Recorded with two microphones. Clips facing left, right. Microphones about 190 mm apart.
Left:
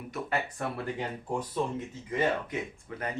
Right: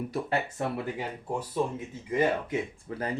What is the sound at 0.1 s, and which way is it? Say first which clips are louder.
Speech: right 3 dB; 25° right (ahead or behind).